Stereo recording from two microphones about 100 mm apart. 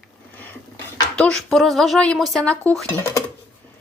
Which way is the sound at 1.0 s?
10° left (ahead or behind).